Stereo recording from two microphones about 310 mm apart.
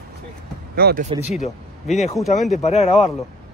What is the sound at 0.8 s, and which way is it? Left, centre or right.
Speech, right.